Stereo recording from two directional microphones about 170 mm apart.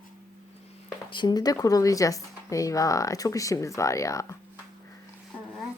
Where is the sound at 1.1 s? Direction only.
25° left (ahead or behind).